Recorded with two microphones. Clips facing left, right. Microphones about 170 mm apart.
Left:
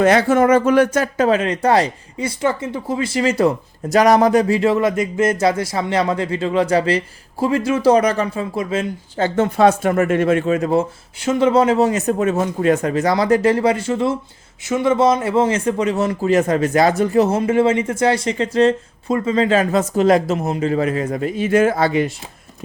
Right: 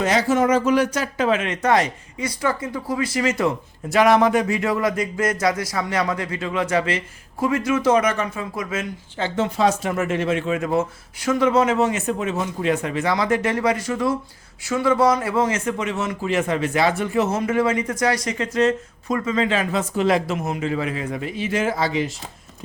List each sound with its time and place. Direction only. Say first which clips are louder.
0.0 s speech: left 5 dB; 55° left (ahead or behind); by 8.9 s 30° left (ahead or behind)
9.1 s speech: left 5 dB; 45° left (ahead or behind)